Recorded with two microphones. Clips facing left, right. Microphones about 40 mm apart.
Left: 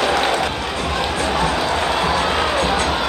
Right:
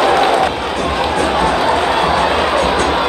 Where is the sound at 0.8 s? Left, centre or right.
Centre.